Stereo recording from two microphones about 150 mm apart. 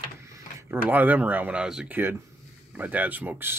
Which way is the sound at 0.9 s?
10° right (ahead or behind).